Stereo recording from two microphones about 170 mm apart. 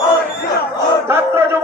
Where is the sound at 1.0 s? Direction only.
15° right (ahead or behind).